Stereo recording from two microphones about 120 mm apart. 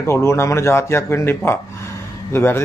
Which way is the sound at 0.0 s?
20° left (ahead or behind).